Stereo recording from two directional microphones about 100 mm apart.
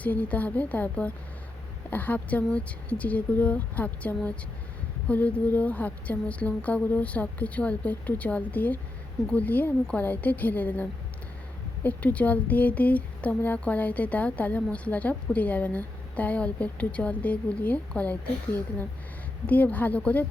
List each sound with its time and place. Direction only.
0.0 s speech: 15° left (ahead or behind)